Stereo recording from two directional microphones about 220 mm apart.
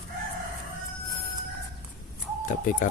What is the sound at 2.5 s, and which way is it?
Speech, 35° left (ahead or behind).